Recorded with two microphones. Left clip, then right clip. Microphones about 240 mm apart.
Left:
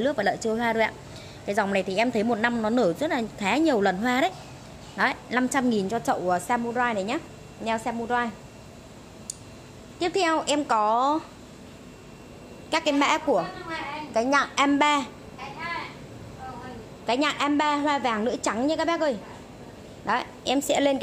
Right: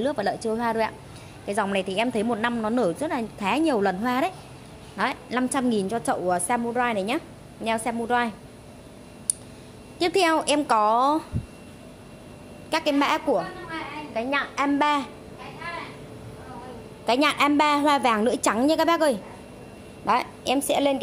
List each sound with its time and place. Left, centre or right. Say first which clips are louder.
0.0 s a woman's voice: left 1 dB; centre; by 8.3 s right
9.9 s a woman's voice: right 3 dB; right
12.6 s a woman's voice: even; centre
14.1 s a woman's voice: left 4 dB; centre
17.0 s a woman's voice: right 4 dB; right
20.1 s a woman's voice: right 3 dB; centre